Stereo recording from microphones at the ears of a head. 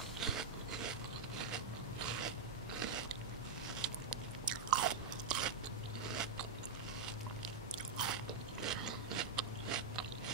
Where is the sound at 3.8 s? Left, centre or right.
Right.